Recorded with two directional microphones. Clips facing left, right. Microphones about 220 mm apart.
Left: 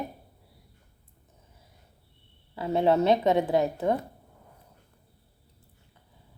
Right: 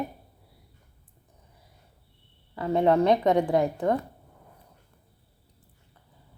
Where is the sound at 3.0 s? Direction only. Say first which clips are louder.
Right 1 dB; 20° left (ahead or behind).